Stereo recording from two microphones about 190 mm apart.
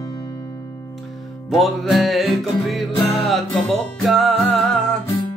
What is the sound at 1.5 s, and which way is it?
Music, centre (ahead or behind).